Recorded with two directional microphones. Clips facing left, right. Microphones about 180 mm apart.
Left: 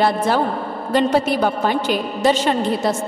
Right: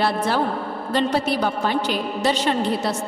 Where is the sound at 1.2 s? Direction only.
50° left (ahead or behind).